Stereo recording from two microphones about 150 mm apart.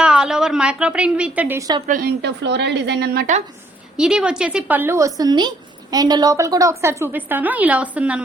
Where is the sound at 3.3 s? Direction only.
60° right (ahead or behind).